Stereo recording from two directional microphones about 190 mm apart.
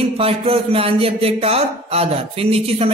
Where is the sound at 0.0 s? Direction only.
30° right (ahead or behind).